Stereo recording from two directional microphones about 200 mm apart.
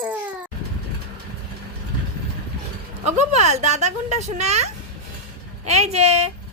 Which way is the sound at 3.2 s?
35° right (ahead or behind).